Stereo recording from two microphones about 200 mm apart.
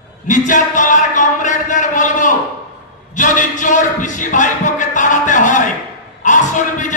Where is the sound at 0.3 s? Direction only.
40° left (ahead or behind).